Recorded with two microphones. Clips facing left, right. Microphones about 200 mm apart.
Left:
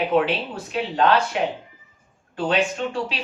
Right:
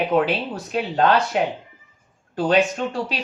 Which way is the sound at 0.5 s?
40° right (ahead or behind).